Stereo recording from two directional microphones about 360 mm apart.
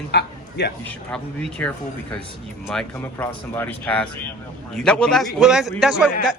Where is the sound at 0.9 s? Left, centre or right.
Centre.